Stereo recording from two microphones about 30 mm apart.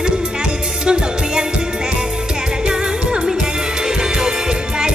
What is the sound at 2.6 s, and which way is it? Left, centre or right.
Music, right.